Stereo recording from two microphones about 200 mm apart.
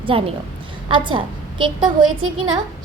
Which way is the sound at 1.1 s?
25° right (ahead or behind).